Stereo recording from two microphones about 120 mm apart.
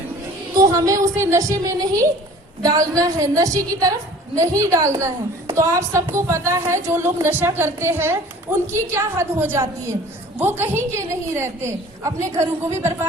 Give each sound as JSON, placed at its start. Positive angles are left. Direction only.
{"t": 0.5, "sound": "a woman's voice", "side_deg": -30}